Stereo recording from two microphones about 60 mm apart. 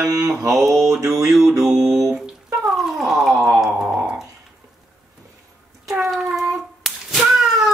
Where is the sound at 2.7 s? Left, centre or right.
Centre.